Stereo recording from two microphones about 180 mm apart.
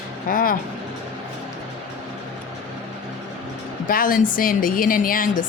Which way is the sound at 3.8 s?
50° left (ahead or behind).